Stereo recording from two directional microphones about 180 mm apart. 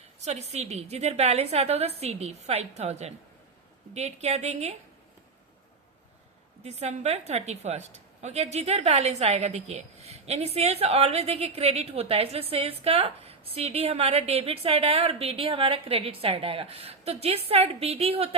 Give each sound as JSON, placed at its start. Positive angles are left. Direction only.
{"t": 0.2, "sound": "a woman's voice", "side_deg": -35}
{"t": 6.7, "sound": "a woman's voice", "side_deg": -35}